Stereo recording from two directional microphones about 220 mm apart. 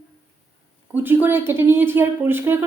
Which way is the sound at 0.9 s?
10° right (ahead or behind).